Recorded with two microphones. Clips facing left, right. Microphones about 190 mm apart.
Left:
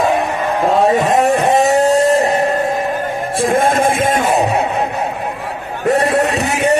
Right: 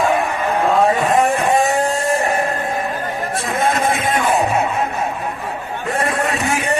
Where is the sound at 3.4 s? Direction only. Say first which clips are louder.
Left 6 dB; 50° left (ahead or behind).